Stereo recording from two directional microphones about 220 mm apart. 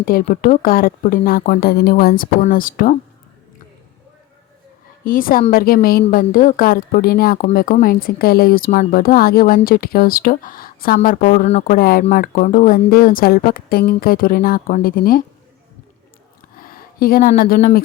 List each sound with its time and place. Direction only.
0.0 s a woman's voice: 40° left (ahead or behind)
5.0 s a woman's voice: 40° left (ahead or behind)
16.6 s speech: 40° left (ahead or behind)